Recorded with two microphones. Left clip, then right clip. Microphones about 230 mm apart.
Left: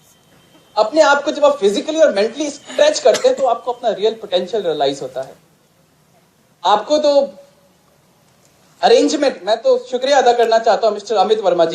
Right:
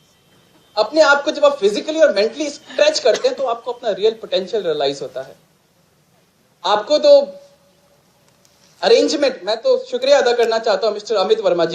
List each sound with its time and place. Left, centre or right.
0.8 s a man's voice: right
6.6 s a man's voice: right
8.8 s a man's voice: right